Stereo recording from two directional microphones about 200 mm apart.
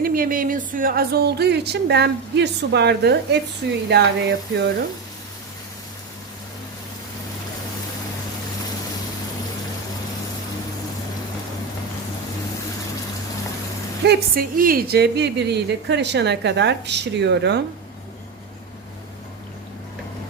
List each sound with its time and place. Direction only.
0.0 s speech: 45° right (ahead or behind)
14.0 s speech: 50° right (ahead or behind)